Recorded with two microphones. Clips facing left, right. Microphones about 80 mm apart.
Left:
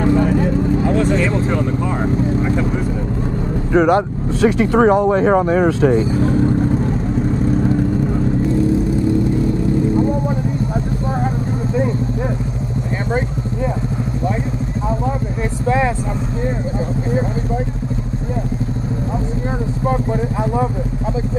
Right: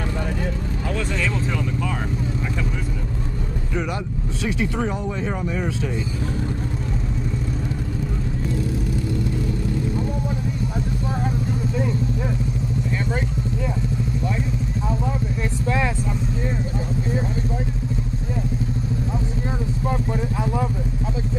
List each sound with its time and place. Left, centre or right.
0.0 s vehicle: left
3.7 s speech: left
9.9 s vehicle: left
15.6 s vehicle: left
19.9 s speech: left